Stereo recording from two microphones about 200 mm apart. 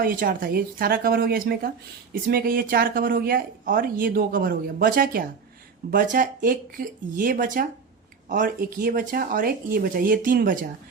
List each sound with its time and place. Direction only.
0.0 s speech: 45° right (ahead or behind)